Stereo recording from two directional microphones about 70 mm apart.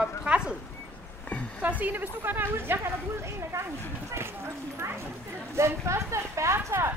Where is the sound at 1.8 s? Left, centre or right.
Right.